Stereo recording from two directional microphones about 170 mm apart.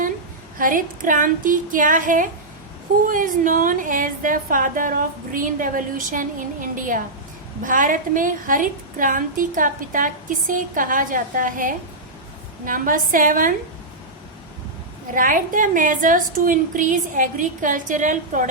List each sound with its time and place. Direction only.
0.6 s a woman's voice: 50° right (ahead or behind)
15.1 s a woman's voice: 50° right (ahead or behind)